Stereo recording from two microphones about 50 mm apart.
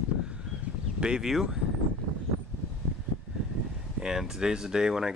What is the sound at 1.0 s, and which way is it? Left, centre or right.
Speech, centre.